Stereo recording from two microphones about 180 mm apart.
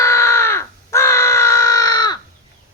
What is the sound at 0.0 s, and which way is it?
Crow, 15° left (ahead or behind).